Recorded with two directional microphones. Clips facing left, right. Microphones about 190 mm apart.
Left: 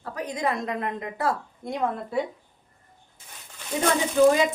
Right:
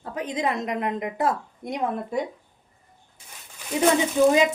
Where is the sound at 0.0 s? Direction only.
20° right (ahead or behind).